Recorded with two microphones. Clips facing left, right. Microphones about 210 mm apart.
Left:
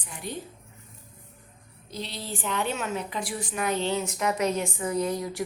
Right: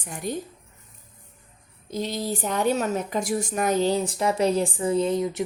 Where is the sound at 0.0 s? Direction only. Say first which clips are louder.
Right 6 dB; 45° right (ahead or behind).